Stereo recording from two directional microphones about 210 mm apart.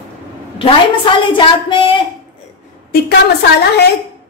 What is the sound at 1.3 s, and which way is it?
Speech, 20° left (ahead or behind).